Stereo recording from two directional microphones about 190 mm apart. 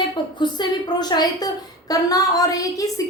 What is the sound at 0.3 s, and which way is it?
A woman's voice, 25° left (ahead or behind).